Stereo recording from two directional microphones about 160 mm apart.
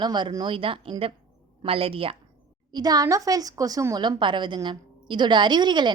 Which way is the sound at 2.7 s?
25° right (ahead or behind).